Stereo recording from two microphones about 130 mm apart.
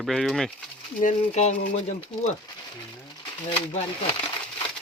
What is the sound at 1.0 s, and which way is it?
Speech, 70° left (ahead or behind).